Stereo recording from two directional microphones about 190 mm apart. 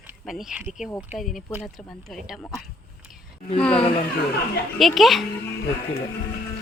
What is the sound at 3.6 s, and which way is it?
Speech, 5° left (ahead or behind).